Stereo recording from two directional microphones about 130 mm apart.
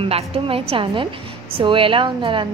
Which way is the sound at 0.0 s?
45° right (ahead or behind).